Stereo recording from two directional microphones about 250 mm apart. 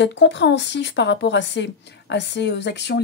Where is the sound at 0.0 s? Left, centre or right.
Left.